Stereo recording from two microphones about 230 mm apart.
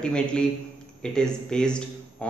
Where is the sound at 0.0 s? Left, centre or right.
Centre.